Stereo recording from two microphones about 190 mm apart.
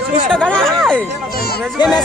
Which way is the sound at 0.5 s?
Centre (ahead or behind).